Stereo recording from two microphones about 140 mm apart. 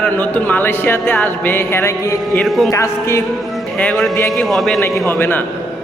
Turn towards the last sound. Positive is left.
turn(degrees=0)  # may be behind; listen again after turning